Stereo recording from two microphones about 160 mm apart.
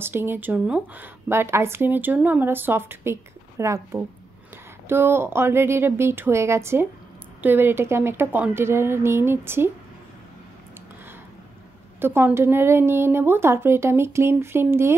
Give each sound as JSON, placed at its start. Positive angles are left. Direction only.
{"t": 0.0, "sound": "speech", "side_deg": -15}
{"t": 12.0, "sound": "speech", "side_deg": -15}